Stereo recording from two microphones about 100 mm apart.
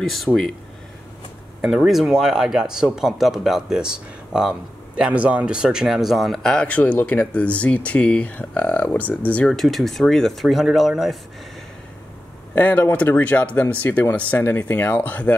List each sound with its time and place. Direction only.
0.3 s speech: 5° left (ahead or behind)
1.6 s speech: 5° right (ahead or behind); by 9.5 s 15° left (ahead or behind)
9.5 s speech: 5° left (ahead or behind)
12.5 s speech: 15° left (ahead or behind)